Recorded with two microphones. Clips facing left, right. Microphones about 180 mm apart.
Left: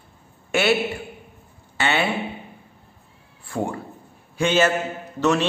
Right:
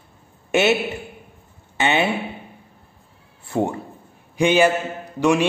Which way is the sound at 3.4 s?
20° right (ahead or behind).